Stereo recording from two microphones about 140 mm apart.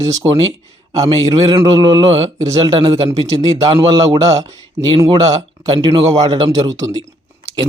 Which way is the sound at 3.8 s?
25° right (ahead or behind).